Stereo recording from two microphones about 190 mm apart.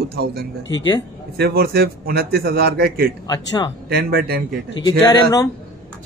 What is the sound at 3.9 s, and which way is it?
Speech, 55° right (ahead or behind).